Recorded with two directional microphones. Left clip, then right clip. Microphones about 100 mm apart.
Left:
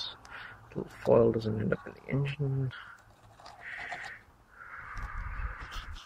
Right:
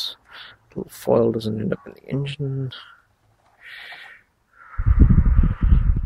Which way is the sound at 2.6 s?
40° right (ahead or behind).